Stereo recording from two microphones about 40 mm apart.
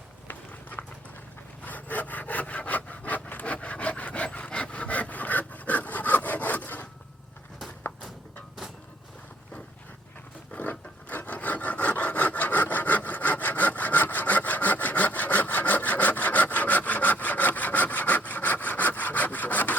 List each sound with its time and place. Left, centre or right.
0.8 s dog: left
1.6 s sawing: left
3.4 s wood: left
10.5 s wood: left